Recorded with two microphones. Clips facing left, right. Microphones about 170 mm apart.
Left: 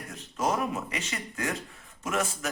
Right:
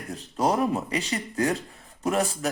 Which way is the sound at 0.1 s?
35° right (ahead or behind).